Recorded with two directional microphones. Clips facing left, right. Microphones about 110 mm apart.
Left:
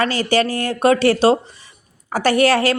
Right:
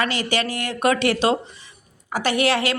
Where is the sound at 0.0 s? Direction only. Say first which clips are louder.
Left 6 dB; 35° left (ahead or behind).